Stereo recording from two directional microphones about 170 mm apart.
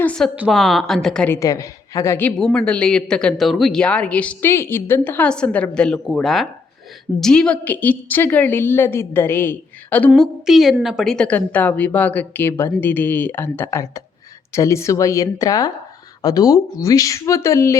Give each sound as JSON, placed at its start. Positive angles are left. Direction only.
{"t": 0.0, "sound": "a woman's voice", "side_deg": 5}
{"t": 1.4, "sound": "a woman's voice", "side_deg": 20}
{"t": 10.1, "sound": "a woman's voice", "side_deg": 0}